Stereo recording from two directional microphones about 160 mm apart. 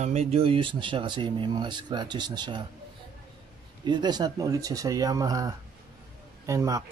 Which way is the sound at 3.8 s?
25° right (ahead or behind).